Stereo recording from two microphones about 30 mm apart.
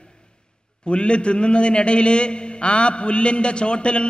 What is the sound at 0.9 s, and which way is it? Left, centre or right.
A man's voice, left.